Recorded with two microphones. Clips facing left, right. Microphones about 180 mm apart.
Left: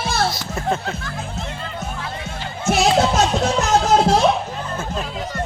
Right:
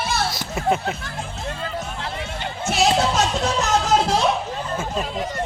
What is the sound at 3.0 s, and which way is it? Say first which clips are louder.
Music: left 3 dB; 45° left (ahead or behind).